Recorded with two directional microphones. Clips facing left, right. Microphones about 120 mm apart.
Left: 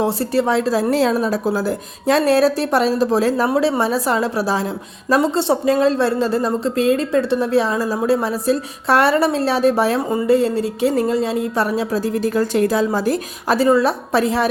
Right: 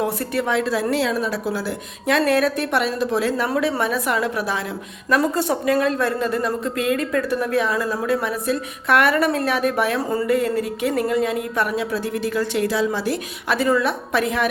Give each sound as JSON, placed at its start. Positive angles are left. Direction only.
{"t": 0.0, "sound": "a woman's voice", "side_deg": 30}